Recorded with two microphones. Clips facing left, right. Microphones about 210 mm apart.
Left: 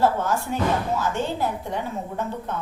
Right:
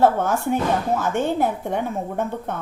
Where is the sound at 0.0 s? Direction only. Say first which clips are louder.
Right 4 dB; 55° right (ahead or behind).